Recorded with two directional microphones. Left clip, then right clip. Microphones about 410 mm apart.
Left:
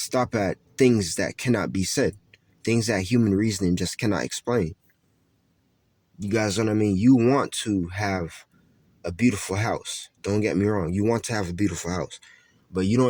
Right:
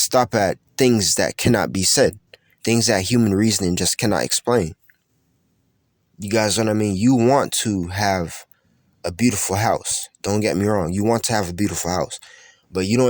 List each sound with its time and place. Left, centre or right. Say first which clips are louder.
0.0 s speech: right 7 dB; centre
6.1 s speech: right 5 dB; right